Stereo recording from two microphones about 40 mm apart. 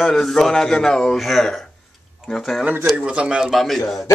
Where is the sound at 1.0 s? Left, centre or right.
Centre.